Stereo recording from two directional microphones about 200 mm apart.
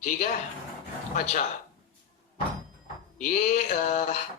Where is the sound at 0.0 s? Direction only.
40° left (ahead or behind).